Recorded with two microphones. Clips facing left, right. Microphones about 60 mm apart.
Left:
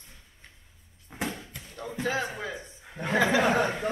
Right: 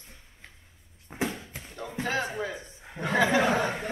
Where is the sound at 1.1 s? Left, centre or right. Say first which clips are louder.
Right 2 dB; centre.